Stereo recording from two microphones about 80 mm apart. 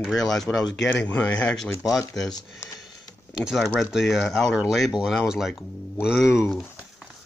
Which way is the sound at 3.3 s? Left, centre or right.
Centre.